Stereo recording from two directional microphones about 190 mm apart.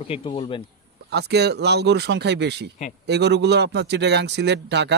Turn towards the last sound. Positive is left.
turn(degrees=-65)  # may be behind; listen again after turning